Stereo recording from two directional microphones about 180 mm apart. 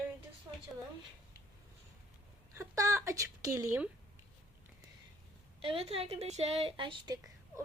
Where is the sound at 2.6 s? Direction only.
15° right (ahead or behind).